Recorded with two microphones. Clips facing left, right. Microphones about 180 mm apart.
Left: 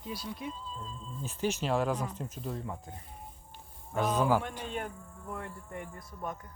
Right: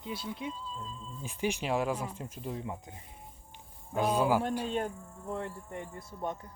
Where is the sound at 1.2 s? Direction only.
10° right (ahead or behind).